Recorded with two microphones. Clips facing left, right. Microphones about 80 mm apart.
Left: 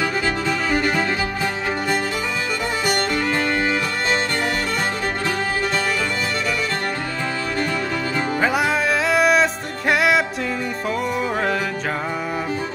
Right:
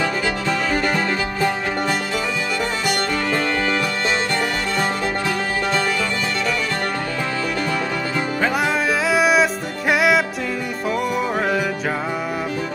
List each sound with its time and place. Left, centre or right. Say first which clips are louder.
8.4 s music: left 1 dB; centre